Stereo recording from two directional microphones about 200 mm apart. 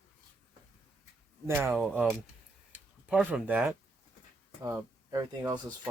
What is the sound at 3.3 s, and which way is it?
Speech, 5° right (ahead or behind).